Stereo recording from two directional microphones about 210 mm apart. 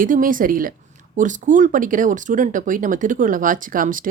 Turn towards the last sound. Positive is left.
turn(degrees=-40)  # may be behind; listen again after turning